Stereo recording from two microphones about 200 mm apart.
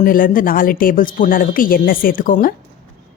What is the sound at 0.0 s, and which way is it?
Speech, 45° left (ahead or behind).